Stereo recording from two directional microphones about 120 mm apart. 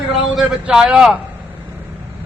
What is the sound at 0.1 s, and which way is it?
A man's voice, centre (ahead or behind).